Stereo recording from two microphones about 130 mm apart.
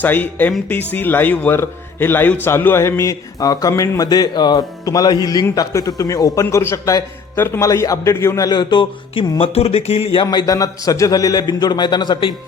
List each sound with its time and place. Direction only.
0.0 s a man's voice: 15° left (ahead or behind)
8.4 s speech: 35° left (ahead or behind)
10.2 s a man's voice: 25° left (ahead or behind)